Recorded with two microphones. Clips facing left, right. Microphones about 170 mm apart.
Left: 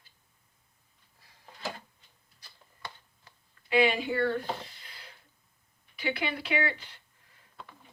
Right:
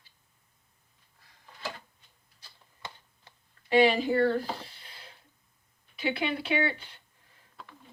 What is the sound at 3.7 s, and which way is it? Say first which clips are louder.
Speech: right 3 dB; 35° right (ahead or behind).